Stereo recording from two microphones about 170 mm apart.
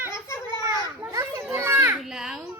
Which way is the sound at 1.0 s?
15° right (ahead or behind).